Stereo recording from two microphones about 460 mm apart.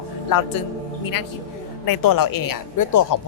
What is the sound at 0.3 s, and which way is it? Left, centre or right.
Speech, left.